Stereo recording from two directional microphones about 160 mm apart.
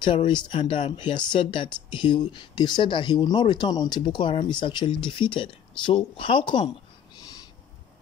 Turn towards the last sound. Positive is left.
turn(degrees=30)  # may be behind; listen again after turning